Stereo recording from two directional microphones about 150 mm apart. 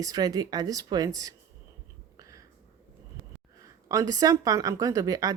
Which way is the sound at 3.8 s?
20° right (ahead or behind).